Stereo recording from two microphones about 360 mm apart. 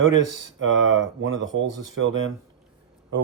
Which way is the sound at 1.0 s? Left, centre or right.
Right.